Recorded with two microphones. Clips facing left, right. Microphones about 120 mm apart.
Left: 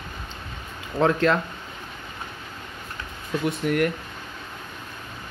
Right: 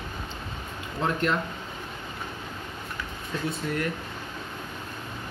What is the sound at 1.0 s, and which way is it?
Speech, 90° left.